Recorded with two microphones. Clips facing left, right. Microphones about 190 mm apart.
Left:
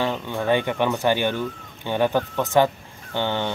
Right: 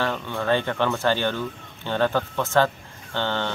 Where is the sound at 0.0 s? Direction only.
15° left (ahead or behind).